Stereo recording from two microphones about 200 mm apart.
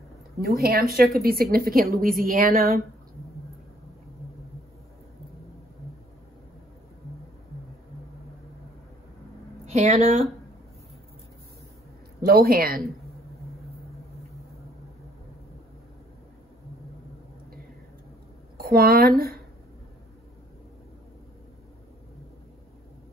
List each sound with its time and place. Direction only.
0.4 s a woman's voice: 50° right (ahead or behind)
9.7 s speech: 30° right (ahead or behind)
12.2 s a woman's voice: 50° right (ahead or behind)
18.6 s speech: 50° right (ahead or behind)